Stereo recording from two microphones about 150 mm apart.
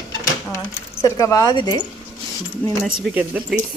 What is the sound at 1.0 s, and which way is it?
Speech, 20° left (ahead or behind).